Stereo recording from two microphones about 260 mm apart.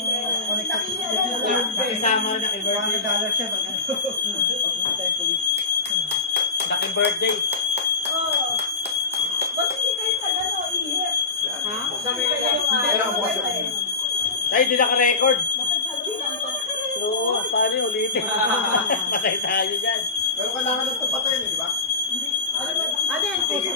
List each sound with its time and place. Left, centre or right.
14.5 s a man's voice: left
18.9 s a man's voice: left